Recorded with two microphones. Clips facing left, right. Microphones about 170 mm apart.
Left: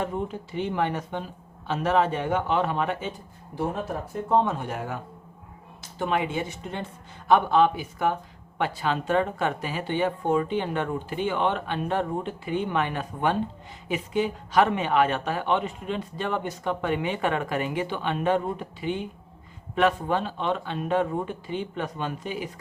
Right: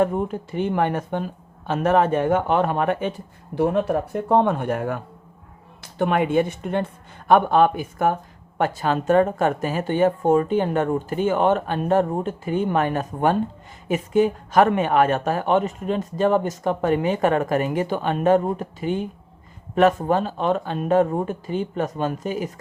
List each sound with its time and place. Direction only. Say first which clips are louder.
0.0 s speech: right 8 dB; 50° right (ahead or behind)